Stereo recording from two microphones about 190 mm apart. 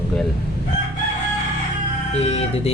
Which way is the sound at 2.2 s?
35° left (ahead or behind).